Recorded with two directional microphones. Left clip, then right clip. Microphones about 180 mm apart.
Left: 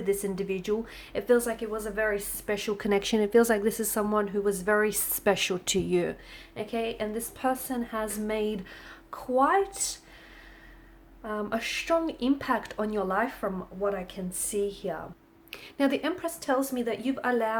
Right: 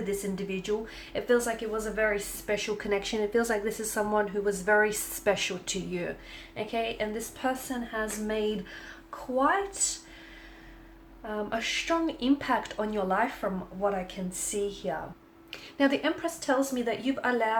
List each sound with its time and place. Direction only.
0.1 s a woman's voice: 45° left (ahead or behind)
6.6 s a woman's voice: 35° left (ahead or behind)
11.2 s speech: 45° left (ahead or behind)
14.7 s speech: 35° left (ahead or behind)